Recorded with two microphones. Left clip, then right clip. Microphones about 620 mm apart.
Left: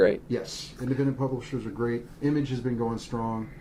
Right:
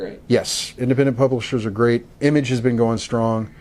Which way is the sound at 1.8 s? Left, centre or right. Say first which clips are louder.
Right 12 dB; right.